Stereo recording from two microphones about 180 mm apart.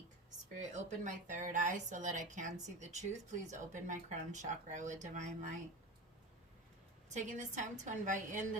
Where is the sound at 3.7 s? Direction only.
45° right (ahead or behind).